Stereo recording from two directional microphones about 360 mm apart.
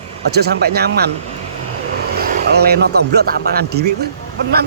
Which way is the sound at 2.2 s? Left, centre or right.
Right.